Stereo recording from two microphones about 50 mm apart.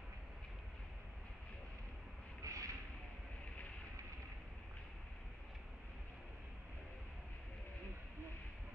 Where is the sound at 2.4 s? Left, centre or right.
Right.